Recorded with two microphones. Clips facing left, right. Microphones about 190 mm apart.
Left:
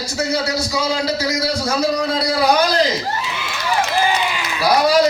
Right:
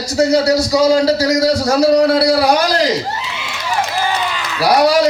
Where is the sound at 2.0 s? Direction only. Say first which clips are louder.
Right 8 dB; 70° right (ahead or behind).